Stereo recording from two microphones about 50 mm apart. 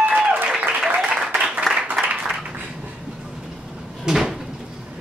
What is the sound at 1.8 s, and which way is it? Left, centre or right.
Applause, right.